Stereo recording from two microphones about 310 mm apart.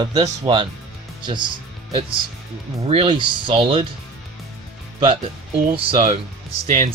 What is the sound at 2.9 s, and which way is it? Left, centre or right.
Speech, centre.